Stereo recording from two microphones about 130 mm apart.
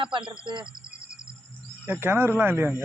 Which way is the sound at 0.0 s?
40° right (ahead or behind).